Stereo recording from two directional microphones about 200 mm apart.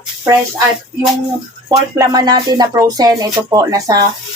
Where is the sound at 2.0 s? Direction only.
20° right (ahead or behind).